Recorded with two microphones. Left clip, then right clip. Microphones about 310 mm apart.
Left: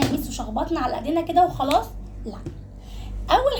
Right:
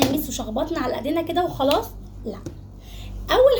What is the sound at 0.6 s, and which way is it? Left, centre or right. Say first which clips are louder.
Speech: even; left.